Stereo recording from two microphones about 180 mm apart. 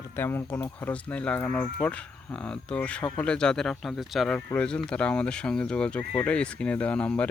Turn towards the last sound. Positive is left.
turn(degrees=5)  # may be behind; listen again after turning